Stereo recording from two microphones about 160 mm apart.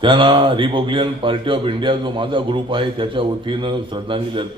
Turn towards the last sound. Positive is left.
turn(degrees=-30)  # may be behind; listen again after turning